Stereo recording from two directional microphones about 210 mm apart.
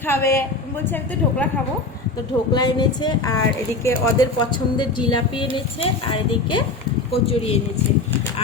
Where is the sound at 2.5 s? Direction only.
20° left (ahead or behind).